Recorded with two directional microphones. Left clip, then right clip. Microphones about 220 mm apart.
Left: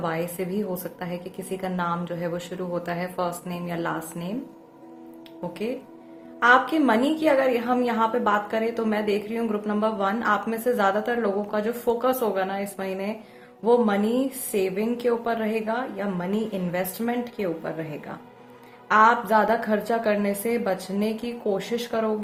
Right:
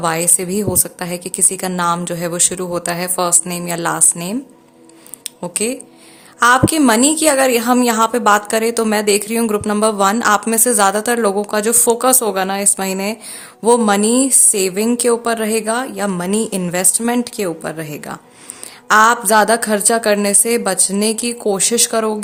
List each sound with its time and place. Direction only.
0.0 s a woman's voice: 40° right (ahead or behind)
5.6 s a woman's voice: 40° right (ahead or behind)